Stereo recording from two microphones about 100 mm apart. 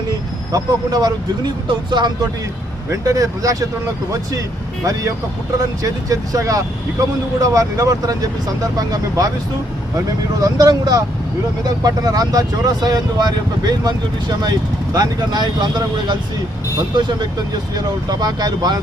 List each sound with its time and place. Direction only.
0.5 s speech: 40° right (ahead or behind)
2.9 s speech: 35° right (ahead or behind)
5.5 s speech: 35° right (ahead or behind)
10.4 s speech: 40° right (ahead or behind)